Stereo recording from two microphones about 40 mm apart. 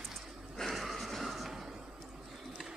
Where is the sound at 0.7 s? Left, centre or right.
Centre.